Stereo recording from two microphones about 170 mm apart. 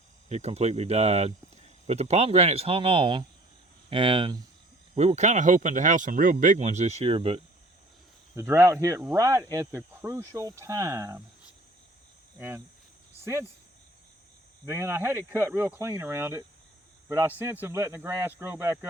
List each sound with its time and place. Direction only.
0.3 s speech: 40° right (ahead or behind)
4.9 s speech: 40° right (ahead or behind)
8.4 s speech: 15° right (ahead or behind)
12.4 s speech: 15° right (ahead or behind)
14.7 s speech: 15° right (ahead or behind)